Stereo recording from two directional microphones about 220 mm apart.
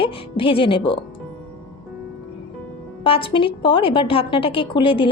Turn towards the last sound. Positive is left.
turn(degrees=25)  # may be behind; listen again after turning